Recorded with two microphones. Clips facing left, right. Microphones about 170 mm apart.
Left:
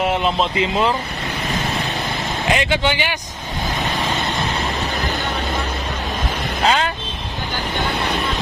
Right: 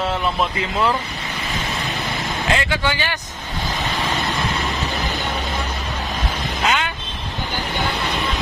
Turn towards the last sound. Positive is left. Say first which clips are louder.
# left 3 dB
turn(degrees=35)  # may be behind; listen again after turning